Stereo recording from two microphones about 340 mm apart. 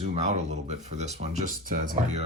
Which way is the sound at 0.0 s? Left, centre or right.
Centre.